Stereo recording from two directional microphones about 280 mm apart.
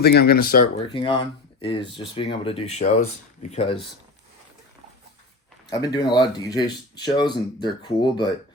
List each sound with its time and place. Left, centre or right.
0.0 s speech: left
0.9 s speech: centre
5.8 s speech: centre